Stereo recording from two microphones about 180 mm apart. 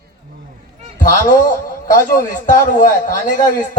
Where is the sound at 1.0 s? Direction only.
50° left (ahead or behind).